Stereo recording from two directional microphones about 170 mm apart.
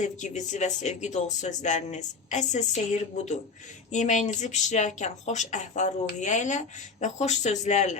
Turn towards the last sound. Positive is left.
turn(degrees=45)  # may be behind; listen again after turning